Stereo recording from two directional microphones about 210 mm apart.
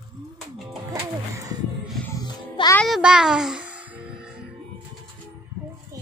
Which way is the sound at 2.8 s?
Centre (ahead or behind).